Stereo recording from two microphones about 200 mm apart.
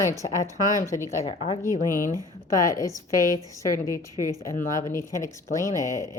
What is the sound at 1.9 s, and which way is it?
Speech, 45° left (ahead or behind).